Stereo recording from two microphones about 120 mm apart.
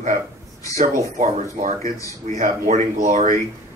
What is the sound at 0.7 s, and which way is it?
Speech, 75° right (ahead or behind).